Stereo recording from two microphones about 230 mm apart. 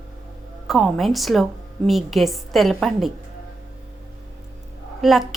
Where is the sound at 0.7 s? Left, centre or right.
Centre.